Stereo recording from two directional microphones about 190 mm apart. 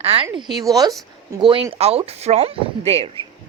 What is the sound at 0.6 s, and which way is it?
A woman's voice, 20° right (ahead or behind).